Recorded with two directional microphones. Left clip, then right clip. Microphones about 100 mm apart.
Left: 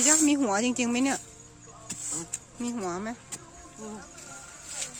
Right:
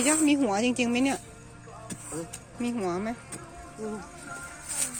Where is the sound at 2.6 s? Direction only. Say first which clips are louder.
Right 3 dB; 45° left (ahead or behind).